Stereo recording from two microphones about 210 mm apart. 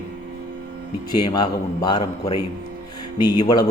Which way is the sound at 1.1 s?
20° left (ahead or behind).